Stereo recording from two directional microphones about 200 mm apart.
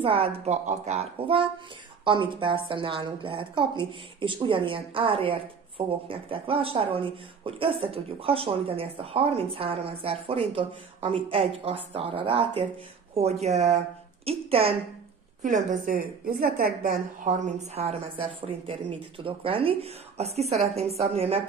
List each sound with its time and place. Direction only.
0.0 s a woman's voice: 30° right (ahead or behind)